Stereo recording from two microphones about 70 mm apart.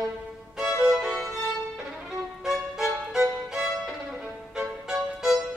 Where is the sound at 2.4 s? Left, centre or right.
Centre.